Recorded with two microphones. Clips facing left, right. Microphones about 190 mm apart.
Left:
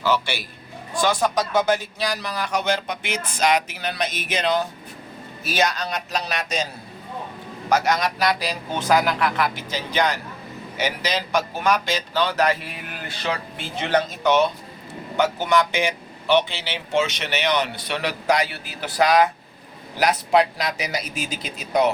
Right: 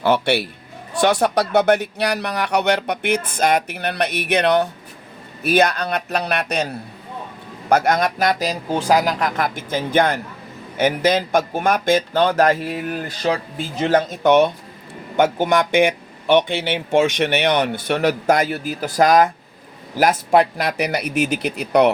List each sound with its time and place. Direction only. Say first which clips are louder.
0.0 s speech: right 6 dB; 60° right (ahead or behind)